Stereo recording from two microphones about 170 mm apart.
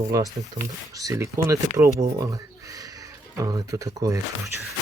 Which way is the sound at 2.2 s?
20° right (ahead or behind).